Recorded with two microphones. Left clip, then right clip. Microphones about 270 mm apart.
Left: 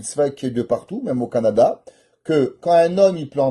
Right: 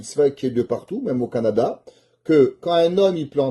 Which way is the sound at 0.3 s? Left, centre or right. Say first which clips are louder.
Left 1 dB; left.